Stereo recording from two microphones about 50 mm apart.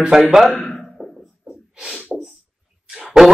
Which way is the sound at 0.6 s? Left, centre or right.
Centre.